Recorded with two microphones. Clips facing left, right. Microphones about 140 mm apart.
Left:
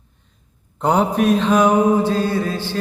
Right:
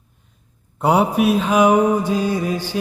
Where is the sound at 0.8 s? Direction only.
10° right (ahead or behind).